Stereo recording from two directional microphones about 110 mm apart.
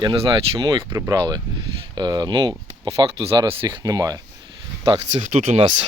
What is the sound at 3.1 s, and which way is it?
Speech, 65° right (ahead or behind).